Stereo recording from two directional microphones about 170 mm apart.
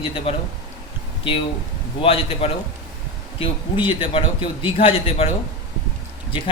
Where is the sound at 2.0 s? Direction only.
35° left (ahead or behind).